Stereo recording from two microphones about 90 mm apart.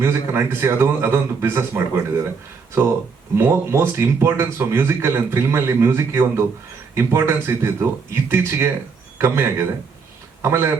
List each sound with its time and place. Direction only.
0.0 s speech: 25° right (ahead or behind)
3.3 s speech: 30° right (ahead or behind)